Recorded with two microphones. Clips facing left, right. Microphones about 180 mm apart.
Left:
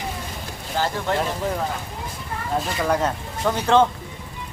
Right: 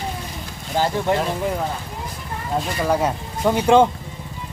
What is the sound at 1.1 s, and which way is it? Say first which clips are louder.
Speech: right 2 dB; 15° right (ahead or behind).